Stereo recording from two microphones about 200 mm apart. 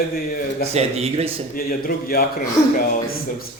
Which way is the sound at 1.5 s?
50° left (ahead or behind).